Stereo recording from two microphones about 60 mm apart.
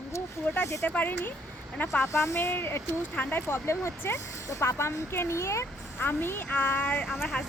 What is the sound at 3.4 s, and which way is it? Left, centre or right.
Speech, left.